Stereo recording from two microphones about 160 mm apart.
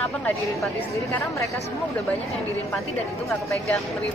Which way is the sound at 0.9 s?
20° left (ahead or behind).